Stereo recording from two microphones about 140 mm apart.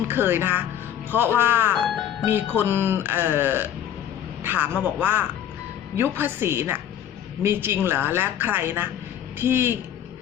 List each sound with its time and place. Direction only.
0.1 s speech: 15° right (ahead or behind)